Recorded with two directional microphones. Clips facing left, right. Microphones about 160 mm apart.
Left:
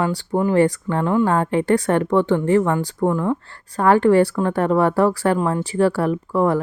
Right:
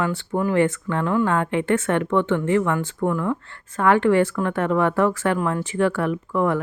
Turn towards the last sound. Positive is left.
turn(degrees=35)  # may be behind; listen again after turning